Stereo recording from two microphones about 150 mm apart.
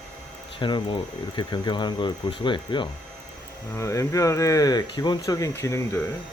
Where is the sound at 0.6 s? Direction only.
30° left (ahead or behind).